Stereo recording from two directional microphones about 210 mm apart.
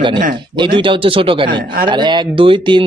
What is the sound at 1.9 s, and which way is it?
Speech, 20° right (ahead or behind).